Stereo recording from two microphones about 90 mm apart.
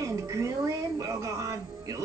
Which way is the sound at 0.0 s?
35° right (ahead or behind).